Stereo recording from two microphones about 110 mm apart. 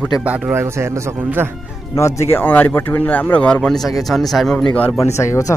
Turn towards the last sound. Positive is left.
turn(degrees=30)  # may be behind; listen again after turning